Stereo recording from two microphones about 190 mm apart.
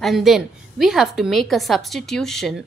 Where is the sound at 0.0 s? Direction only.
Centre (ahead or behind).